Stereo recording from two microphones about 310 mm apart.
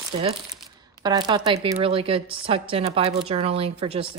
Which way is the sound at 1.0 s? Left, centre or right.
Centre.